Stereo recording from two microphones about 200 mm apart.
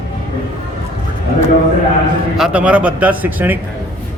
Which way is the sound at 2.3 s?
5° right (ahead or behind).